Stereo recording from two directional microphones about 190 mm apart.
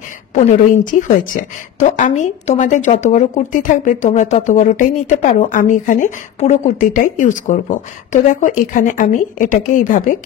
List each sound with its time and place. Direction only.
0.3 s speech: 40° left (ahead or behind)